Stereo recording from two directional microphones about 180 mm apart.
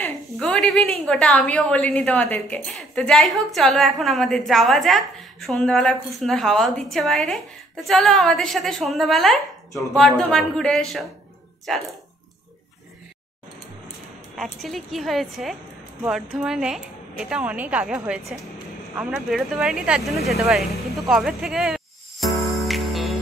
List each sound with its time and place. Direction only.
0.0 s a sound: 5° left (ahead or behind)
1.0 s a woman's voice: 5° left (ahead or behind)
14.3 s a woman's voice: centre (ahead or behind)
21.1 s music: centre (ahead or behind)